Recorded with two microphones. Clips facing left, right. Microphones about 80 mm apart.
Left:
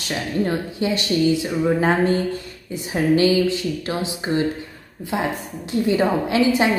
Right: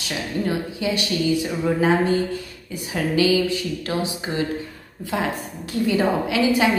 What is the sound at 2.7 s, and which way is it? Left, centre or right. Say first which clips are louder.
A woman's voice: left 4 dB; left.